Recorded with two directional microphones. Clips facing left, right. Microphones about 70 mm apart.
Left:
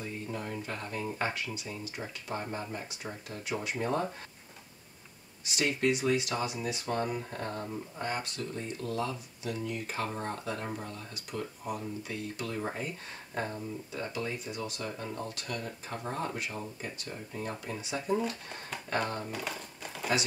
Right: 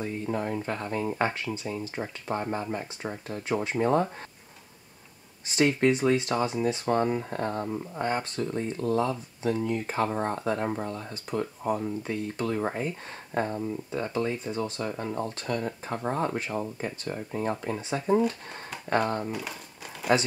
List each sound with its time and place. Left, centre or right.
0.0 s speech: right
5.5 s speech: right
19.3 s crumpling: centre